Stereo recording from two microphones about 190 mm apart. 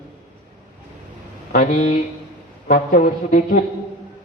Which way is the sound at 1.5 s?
40° left (ahead or behind).